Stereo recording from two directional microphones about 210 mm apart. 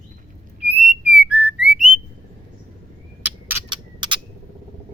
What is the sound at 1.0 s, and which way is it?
Whistling, 5° right (ahead or behind).